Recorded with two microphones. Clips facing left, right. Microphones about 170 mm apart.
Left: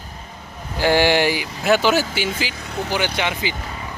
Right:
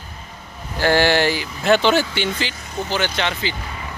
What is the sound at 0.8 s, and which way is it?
Speech, 15° left (ahead or behind).